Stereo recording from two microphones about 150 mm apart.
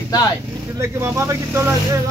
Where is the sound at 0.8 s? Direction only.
20° right (ahead or behind).